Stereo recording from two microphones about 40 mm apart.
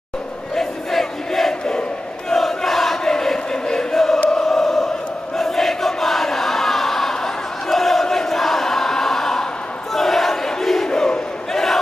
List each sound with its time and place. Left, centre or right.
0.6 s crowd: centre
1.7 s battle cry: centre
2.3 s choir: centre
5.4 s crowd: centre
7.6 s battle cry: centre
10.3 s crowd: centre
10.9 s battle cry: centre
11.5 s battle cry: centre